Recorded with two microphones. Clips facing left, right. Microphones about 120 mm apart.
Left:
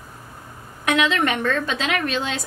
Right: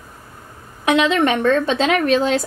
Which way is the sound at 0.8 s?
30° right (ahead or behind).